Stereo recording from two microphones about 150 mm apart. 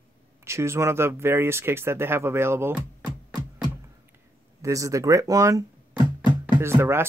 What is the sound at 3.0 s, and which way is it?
Music, 25° right (ahead or behind).